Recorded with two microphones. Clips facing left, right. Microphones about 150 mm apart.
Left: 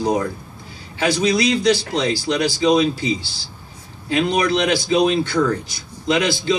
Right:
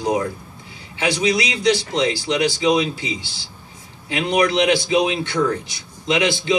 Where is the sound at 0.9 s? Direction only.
35° left (ahead or behind).